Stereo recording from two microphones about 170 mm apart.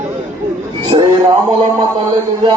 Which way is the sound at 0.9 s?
25° right (ahead or behind).